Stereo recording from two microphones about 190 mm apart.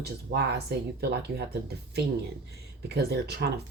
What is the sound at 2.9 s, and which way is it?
Speech, 55° right (ahead or behind).